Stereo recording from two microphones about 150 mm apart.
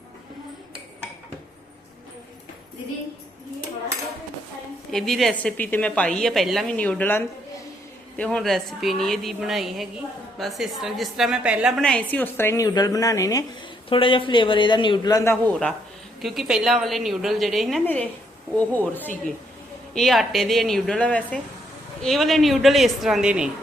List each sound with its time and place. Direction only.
4.9 s a woman's voice: centre (ahead or behind)
11.8 s speech: 5° left (ahead or behind); by 13.4 s 25° left (ahead or behind)
13.9 s a man's voice: 35° left (ahead or behind)
16.2 s a woman's voice: centre (ahead or behind)
19.9 s a woman's voice: centre (ahead or behind)